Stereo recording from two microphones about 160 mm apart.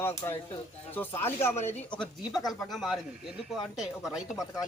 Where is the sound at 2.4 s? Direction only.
Centre (ahead or behind).